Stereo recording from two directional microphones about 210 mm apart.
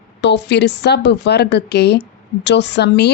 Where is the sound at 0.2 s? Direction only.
55° left (ahead or behind).